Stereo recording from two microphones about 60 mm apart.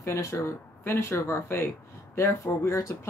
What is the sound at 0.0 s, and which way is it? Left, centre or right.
Speech, left.